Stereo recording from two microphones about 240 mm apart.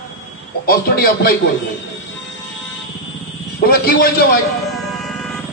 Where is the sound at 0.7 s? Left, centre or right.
Left.